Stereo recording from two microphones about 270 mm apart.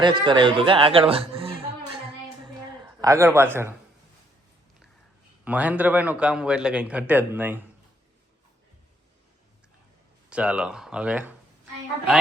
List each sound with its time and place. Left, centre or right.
0.0 s speech: centre
3.0 s speech: centre
5.5 s a man's voice: centre
10.2 s a man's voice: centre